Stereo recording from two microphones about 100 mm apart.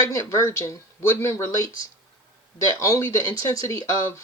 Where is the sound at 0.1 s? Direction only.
30° left (ahead or behind).